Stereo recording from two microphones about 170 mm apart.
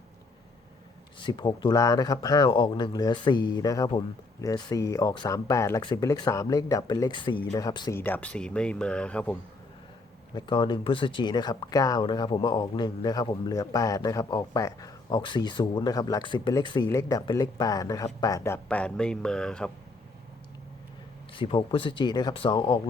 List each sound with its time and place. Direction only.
1.2 s speech: 25° left (ahead or behind)
7.9 s speech: 10° left (ahead or behind)
10.3 s speech: 30° left (ahead or behind); by 19.7 s 5° left (ahead or behind)
21.3 s speech: 30° left (ahead or behind)